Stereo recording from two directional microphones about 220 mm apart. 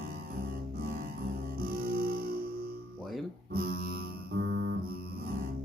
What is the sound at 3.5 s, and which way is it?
Music, 45° right (ahead or behind).